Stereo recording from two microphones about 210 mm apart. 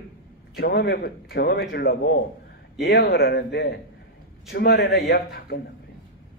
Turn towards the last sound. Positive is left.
turn(degrees=45)  # may be behind; listen again after turning